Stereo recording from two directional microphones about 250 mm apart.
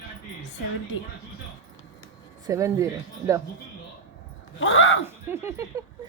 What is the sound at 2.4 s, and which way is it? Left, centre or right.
Speech, centre.